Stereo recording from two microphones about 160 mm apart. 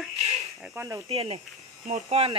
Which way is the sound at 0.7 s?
15° right (ahead or behind).